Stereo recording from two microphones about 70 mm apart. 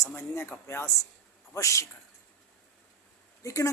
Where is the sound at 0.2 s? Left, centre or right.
Left.